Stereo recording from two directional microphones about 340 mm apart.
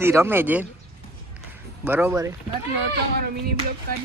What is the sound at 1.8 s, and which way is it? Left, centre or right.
Speech, centre.